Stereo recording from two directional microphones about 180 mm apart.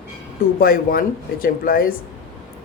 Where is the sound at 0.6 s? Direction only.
55° left (ahead or behind).